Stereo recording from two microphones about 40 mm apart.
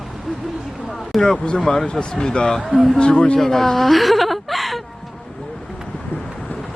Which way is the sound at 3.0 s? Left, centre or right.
Left.